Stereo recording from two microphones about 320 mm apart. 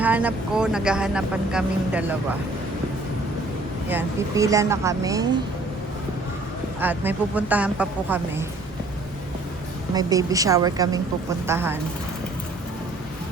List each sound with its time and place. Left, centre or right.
0.0 s speech: centre
3.8 s speech: centre
6.7 s speech: centre
9.9 s speech: centre